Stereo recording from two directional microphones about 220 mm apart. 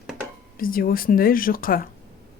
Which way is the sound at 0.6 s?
40° left (ahead or behind).